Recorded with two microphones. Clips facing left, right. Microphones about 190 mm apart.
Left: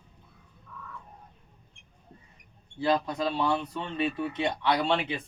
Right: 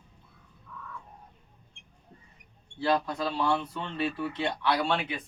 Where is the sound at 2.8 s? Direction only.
20° left (ahead or behind).